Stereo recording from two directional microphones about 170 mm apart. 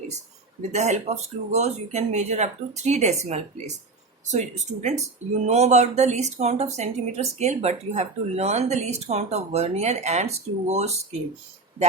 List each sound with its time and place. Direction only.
0.7 s speech: 40° right (ahead or behind)